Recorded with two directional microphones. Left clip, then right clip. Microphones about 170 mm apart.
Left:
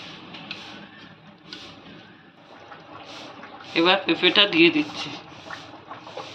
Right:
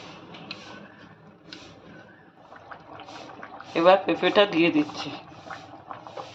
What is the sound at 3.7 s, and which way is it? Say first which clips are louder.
Speech: right 1 dB; 55° right (ahead or behind).